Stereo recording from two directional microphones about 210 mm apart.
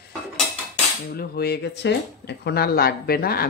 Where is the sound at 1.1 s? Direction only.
50° left (ahead or behind).